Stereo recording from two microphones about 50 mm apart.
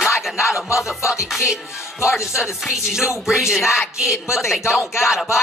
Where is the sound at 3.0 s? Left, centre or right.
Centre.